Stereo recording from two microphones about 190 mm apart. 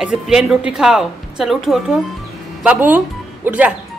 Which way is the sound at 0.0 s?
5° right (ahead or behind).